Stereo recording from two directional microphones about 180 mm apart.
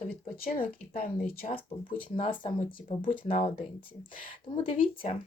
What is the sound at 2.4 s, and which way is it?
Speech, 25° left (ahead or behind).